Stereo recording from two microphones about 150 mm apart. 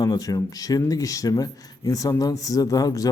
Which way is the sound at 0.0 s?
25° left (ahead or behind).